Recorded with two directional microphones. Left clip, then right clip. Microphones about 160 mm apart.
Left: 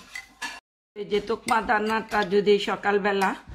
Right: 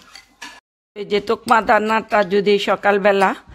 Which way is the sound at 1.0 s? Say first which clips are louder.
Right 7 dB; 85° right.